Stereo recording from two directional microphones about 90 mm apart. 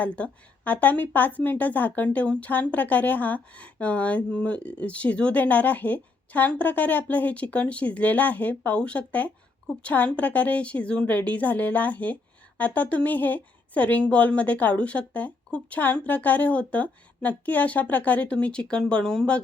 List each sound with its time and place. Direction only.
0.0 s a woman's voice: 15° left (ahead or behind)